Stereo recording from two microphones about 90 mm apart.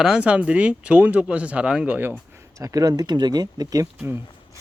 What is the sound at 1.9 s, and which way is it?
Speech, 20° right (ahead or behind).